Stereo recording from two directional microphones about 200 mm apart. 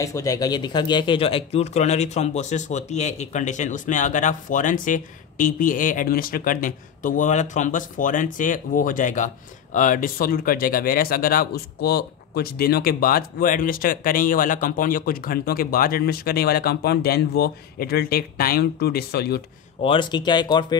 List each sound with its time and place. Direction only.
0.0 s speech: 15° left (ahead or behind); by 19.4 s 55° left (ahead or behind)
19.8 s speech: 25° left (ahead or behind)